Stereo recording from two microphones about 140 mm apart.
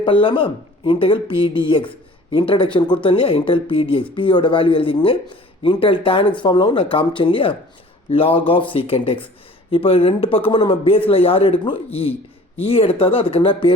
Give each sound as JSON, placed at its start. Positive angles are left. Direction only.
{"t": 0.0, "sound": "speech", "side_deg": 35}